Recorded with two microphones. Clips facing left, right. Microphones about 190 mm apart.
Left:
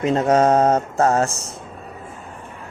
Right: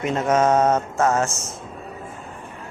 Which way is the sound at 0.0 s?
35° left (ahead or behind).